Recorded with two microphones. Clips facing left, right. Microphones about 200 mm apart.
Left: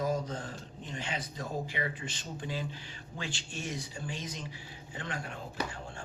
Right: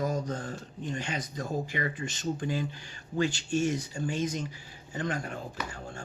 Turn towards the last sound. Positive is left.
turn(degrees=-40)  # may be behind; listen again after turning